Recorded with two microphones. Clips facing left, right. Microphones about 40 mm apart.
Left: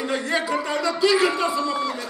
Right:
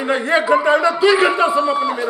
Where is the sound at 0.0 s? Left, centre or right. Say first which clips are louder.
Right 7 dB; right.